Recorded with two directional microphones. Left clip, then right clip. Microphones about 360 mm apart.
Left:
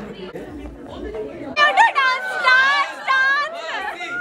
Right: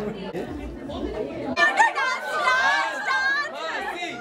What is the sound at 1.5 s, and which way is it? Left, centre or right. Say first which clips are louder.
Chatter: left 5 dB; centre.